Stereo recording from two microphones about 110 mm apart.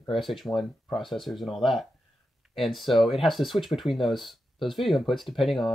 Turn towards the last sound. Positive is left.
turn(degrees=0)  # may be behind; listen again after turning